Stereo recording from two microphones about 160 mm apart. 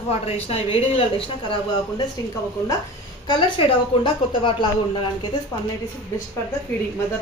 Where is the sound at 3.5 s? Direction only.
30° left (ahead or behind).